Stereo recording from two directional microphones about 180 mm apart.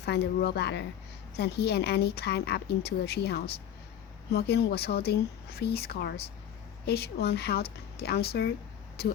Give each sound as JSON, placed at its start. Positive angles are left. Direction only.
{"t": 0.0, "sound": "a woman's voice", "side_deg": 65}